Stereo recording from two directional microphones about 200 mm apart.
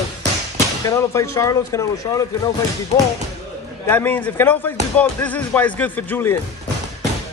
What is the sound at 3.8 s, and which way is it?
Speech, 10° left (ahead or behind).